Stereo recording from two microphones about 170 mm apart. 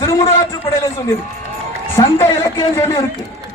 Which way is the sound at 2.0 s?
15° left (ahead or behind).